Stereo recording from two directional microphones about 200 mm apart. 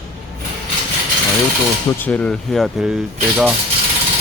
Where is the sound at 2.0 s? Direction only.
5° left (ahead or behind).